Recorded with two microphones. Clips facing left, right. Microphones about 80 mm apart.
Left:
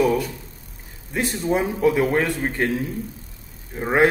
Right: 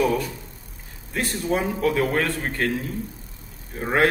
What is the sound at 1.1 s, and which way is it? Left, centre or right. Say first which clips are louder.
A man's voice: left 2 dB; centre.